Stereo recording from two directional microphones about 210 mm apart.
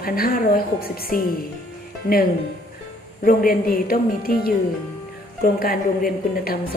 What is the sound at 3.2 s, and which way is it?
A woman's voice, 40° left (ahead or behind).